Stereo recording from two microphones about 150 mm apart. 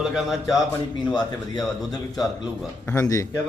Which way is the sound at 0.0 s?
Centre (ahead or behind).